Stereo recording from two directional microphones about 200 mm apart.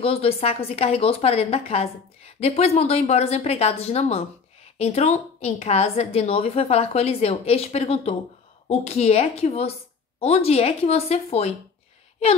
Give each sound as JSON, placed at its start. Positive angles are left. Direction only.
{"t": 0.0, "sound": "a woman's voice", "side_deg": 30}